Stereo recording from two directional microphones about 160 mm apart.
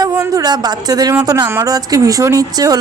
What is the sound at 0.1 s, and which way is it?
Speech, 20° right (ahead or behind).